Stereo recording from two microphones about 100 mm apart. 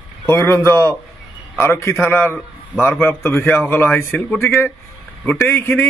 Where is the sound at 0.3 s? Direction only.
25° left (ahead or behind).